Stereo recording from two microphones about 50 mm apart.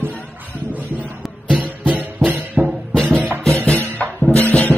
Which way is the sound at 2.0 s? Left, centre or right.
Right.